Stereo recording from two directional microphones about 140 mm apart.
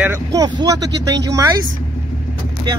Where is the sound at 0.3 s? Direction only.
25° right (ahead or behind).